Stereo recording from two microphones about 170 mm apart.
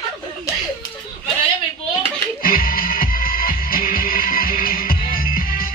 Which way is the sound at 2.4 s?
60° left (ahead or behind).